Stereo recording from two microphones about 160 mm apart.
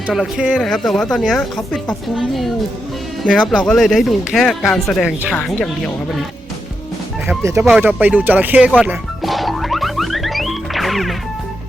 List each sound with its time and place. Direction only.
0.1 s a woman's voice: 5° right (ahead or behind)
7.3 s bow-wow: 20° right (ahead or behind)
7.8 s speech: 10° right (ahead or behind)
8.8 s music: 5° right (ahead or behind)